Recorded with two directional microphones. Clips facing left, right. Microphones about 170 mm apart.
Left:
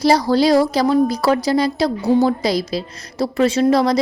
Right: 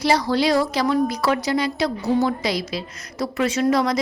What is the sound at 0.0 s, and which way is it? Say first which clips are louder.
A woman's voice: left 5 dB; 35° left (ahead or behind).